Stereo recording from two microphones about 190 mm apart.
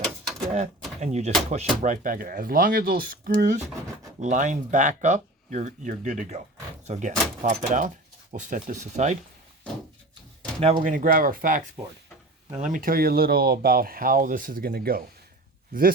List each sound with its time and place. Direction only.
0.0 s a sound: centre (ahead or behind)
0.9 s speech: 35° right (ahead or behind)
10.8 s speech: 45° right (ahead or behind)